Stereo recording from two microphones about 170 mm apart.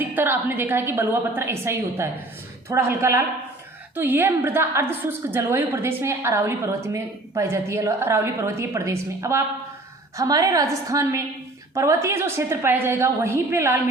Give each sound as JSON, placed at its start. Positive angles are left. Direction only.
{"t": 0.0, "sound": "a woman's voice", "side_deg": -10}